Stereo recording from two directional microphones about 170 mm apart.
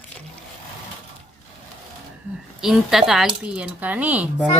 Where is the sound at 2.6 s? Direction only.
Centre (ahead or behind).